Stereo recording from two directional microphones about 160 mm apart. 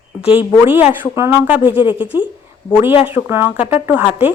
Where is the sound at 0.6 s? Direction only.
15° right (ahead or behind).